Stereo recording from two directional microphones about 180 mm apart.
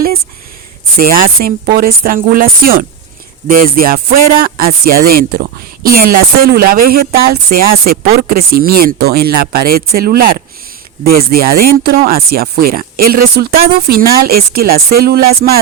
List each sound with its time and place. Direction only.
0.9 s speech: 55° right (ahead or behind)